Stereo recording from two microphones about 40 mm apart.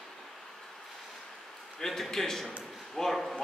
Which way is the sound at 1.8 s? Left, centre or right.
Centre.